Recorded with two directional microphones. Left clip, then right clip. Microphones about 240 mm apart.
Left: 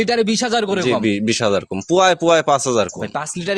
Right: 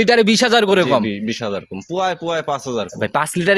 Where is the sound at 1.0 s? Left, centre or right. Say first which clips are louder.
Left 6 dB; left.